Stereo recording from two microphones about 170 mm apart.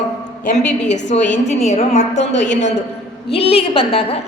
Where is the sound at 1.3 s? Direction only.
40° left (ahead or behind).